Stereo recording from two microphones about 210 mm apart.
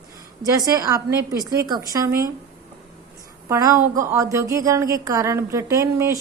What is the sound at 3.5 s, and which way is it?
A woman's voice, 15° right (ahead or behind).